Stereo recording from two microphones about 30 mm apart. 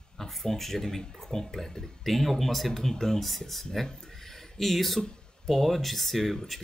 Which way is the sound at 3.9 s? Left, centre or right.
Centre.